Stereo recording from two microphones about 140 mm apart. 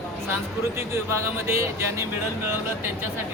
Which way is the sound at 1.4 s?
20° right (ahead or behind).